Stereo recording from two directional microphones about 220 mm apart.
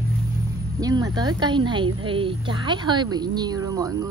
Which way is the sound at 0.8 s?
15° right (ahead or behind).